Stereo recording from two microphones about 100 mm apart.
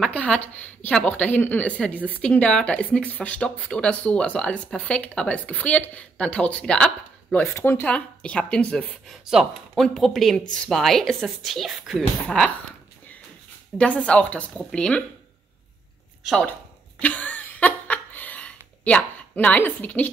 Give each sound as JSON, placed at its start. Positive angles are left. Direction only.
{"t": 0.0, "sound": "speech", "side_deg": 10}
{"t": 7.5, "sound": "speech", "side_deg": 25}
{"t": 7.8, "sound": "speech", "side_deg": 10}
{"t": 9.1, "sound": "speech", "side_deg": -5}
{"t": 12.3, "sound": "speech", "side_deg": 10}
{"t": 13.7, "sound": "speech", "side_deg": 10}
{"t": 17.0, "sound": "a sound", "side_deg": 15}